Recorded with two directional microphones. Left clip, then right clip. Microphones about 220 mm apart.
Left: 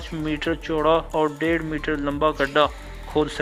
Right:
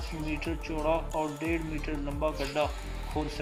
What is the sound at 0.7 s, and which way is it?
Speech, 15° left (ahead or behind).